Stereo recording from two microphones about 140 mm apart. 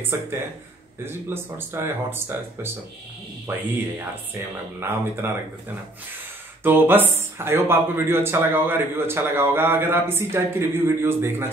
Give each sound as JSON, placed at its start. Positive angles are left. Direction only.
{"t": 0.1, "sound": "speech", "side_deg": -20}
{"t": 4.3, "sound": "speech", "side_deg": -15}
{"t": 6.6, "sound": "speech", "side_deg": -15}